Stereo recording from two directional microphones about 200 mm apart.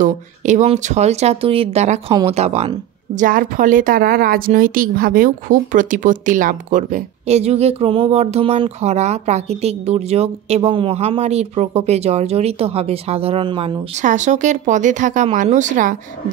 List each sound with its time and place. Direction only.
0.0 s a woman's voice: 35° right (ahead or behind)
3.2 s a woman's voice: 45° right (ahead or behind); by 13.7 s 25° right (ahead or behind)
14.0 s a woman's voice: 40° right (ahead or behind)